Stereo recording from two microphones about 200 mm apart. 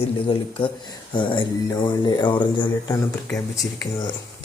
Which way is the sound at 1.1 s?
25° left (ahead or behind).